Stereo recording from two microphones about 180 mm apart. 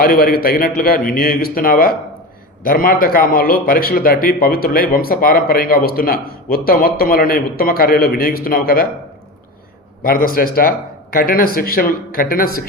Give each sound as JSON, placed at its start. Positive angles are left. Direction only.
{"t": 0.0, "sound": "a man's voice", "side_deg": 55}
{"t": 10.0, "sound": "speech", "side_deg": 55}